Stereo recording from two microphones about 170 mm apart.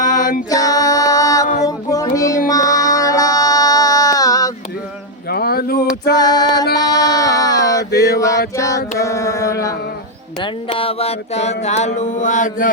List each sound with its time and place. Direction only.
0.0 s music: 50° left (ahead or behind)
0.5 s music: 20° left (ahead or behind)
1.6 s child singing: 20° left (ahead or behind)
2.5 s music: 20° left (ahead or behind)
5.3 s a sound: 65° left (ahead or behind)
6.1 s a sound: 25° left (ahead or behind)
8.0 s male singing: 20° left (ahead or behind)
8.5 s a sound: 20° left (ahead or behind)
10.7 s mantra: 35° left (ahead or behind); by 12.7 s 50° left (ahead or behind)